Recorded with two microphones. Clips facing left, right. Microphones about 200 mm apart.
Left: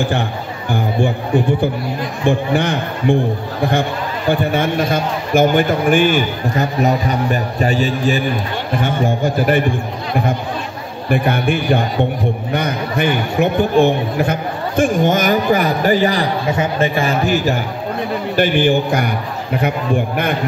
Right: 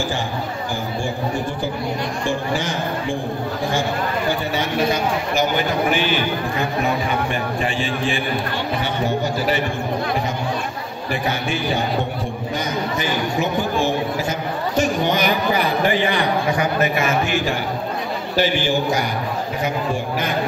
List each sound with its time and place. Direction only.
1.0 s a man's voice: 60° left (ahead or behind)
4.3 s a man's voice: 55° left (ahead or behind)
11.1 s a man's voice: 55° left (ahead or behind); by 16.3 s 40° left (ahead or behind)
16.4 s a man's voice: 25° left (ahead or behind)
18.3 s a man's voice: 55° left (ahead or behind)